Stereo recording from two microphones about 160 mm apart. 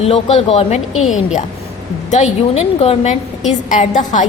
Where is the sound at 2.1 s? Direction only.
45° left (ahead or behind).